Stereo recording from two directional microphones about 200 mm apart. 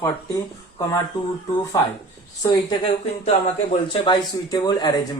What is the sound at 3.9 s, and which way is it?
Speech, 25° left (ahead or behind).